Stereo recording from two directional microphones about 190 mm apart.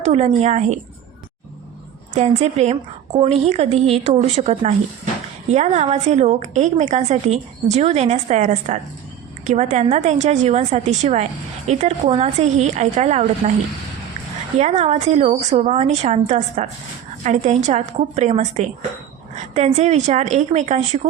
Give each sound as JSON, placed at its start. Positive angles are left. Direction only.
{"t": 0.0, "sound": "a woman's voice", "side_deg": -35}
{"t": 2.1, "sound": "a woman's voice", "side_deg": -35}
{"t": 14.6, "sound": "a woman's voice", "side_deg": -35}